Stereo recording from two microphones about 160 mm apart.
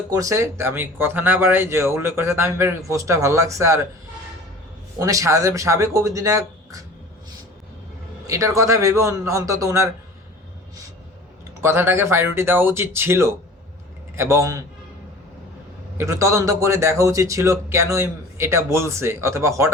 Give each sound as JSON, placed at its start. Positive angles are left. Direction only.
{"t": 0.1, "sound": "a man's voice", "side_deg": -20}
{"t": 4.9, "sound": "speech", "side_deg": -20}
{"t": 8.3, "sound": "speech", "side_deg": -20}
{"t": 11.6, "sound": "a man's voice", "side_deg": -15}
{"t": 16.0, "sound": "a man's voice", "side_deg": -20}